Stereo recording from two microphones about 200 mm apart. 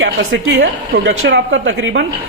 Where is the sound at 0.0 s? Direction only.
80° right.